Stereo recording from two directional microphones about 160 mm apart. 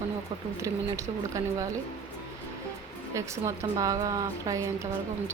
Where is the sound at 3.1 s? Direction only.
20° right (ahead or behind).